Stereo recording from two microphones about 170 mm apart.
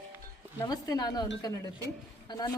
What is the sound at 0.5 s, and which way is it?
Speech, 20° left (ahead or behind).